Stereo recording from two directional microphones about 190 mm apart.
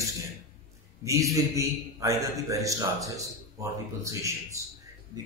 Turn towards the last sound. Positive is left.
turn(degrees=-15)  # may be behind; listen again after turning